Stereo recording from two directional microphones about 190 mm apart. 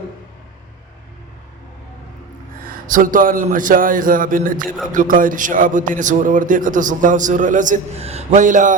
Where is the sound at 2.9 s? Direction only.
45° right (ahead or behind).